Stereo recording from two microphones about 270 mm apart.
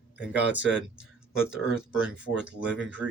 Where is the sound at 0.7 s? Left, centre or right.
Centre.